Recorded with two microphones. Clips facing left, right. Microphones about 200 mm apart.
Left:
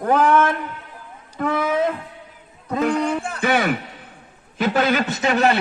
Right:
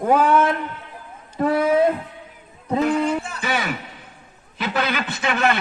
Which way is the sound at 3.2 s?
55° left (ahead or behind).